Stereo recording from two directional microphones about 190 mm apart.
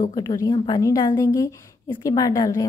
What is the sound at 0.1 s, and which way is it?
A woman's voice, 20° left (ahead or behind).